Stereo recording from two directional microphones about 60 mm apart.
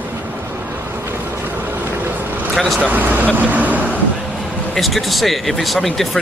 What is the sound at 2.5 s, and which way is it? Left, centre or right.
Speech, centre.